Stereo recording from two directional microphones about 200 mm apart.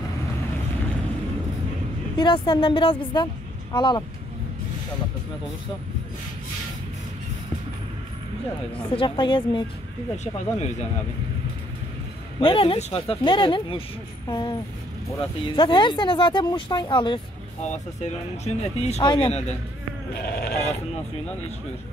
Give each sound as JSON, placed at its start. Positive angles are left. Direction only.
{"t": 2.1, "sound": "speech", "side_deg": 25}
{"t": 8.9, "sound": "speech", "side_deg": 25}
{"t": 10.1, "sound": "speech", "side_deg": 35}
{"t": 12.4, "sound": "speech", "side_deg": 25}
{"t": 17.6, "sound": "speech", "side_deg": 35}
{"t": 20.2, "sound": "sheep", "side_deg": 50}